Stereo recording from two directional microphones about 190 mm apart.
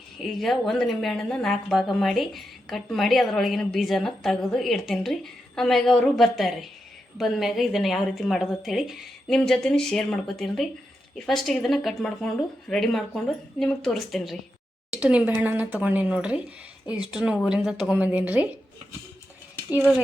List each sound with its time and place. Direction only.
0.2 s speech: centre (ahead or behind)